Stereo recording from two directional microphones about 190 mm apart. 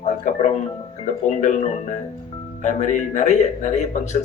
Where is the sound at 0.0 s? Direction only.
40° left (ahead or behind).